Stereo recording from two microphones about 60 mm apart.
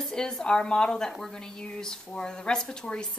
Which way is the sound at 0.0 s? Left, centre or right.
Centre.